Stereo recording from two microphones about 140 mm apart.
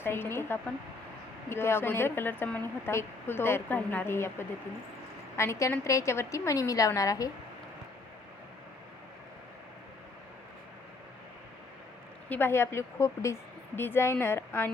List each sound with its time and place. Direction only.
0.0 s a woman's voice: 15° left (ahead or behind)
12.3 s speech: 15° left (ahead or behind)